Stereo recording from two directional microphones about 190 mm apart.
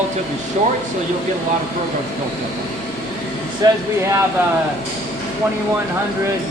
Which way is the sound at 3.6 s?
20° right (ahead or behind).